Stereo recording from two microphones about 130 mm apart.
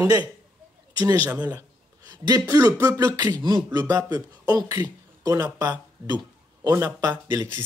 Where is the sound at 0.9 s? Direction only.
30° right (ahead or behind).